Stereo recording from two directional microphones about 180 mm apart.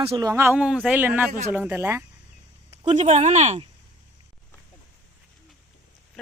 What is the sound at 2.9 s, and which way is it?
Speech, 40° right (ahead or behind).